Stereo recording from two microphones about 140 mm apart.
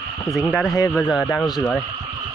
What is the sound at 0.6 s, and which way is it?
Speech, 25° left (ahead or behind).